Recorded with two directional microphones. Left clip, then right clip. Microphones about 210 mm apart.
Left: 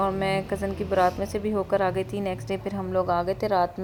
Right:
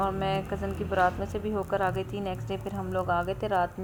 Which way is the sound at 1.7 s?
60° left (ahead or behind).